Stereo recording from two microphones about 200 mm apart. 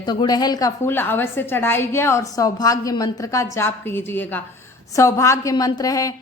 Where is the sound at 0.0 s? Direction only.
20° left (ahead or behind).